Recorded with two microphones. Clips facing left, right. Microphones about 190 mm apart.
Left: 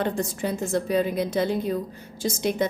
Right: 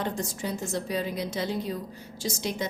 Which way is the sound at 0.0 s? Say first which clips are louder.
Left 5 dB; 55° left (ahead or behind).